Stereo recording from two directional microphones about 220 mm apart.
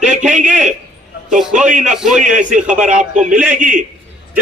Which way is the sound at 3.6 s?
35° right (ahead or behind).